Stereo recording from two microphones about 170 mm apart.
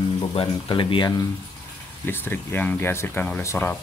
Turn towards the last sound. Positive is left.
turn(degrees=15)  # may be behind; listen again after turning